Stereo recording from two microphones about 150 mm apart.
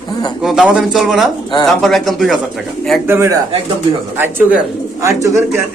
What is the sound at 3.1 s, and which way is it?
A man's voice, 15° right (ahead or behind).